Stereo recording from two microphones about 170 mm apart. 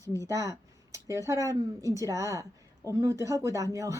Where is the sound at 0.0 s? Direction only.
15° left (ahead or behind).